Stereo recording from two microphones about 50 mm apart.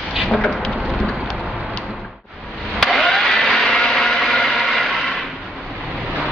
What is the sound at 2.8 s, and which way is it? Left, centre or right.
Engine, centre.